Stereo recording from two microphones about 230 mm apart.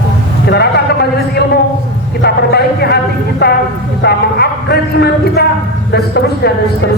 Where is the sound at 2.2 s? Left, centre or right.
Left.